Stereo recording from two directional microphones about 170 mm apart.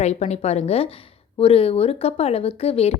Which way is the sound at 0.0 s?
40° left (ahead or behind).